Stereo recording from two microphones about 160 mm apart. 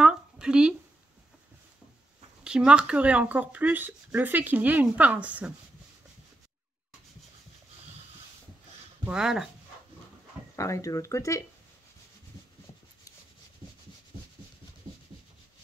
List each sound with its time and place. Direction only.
0.0 s a sound: 5° right (ahead or behind)
2.4 s speech: 5° right (ahead or behind)
9.0 s speech: 5° right (ahead or behind)
10.5 s speech: 20° left (ahead or behind)